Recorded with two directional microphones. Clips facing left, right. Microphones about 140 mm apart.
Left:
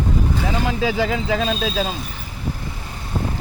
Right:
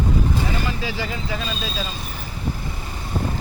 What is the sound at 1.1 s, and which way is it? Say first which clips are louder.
Speech: left 7 dB; 90° left.